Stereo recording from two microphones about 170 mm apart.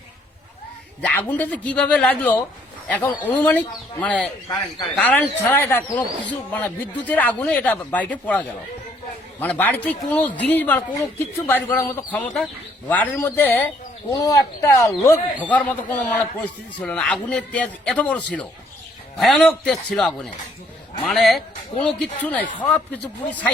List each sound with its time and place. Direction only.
1.3 s speech: 10° left (ahead or behind)
4.4 s speech: 20° left (ahead or behind)
4.9 s a man's voice: 10° left (ahead or behind)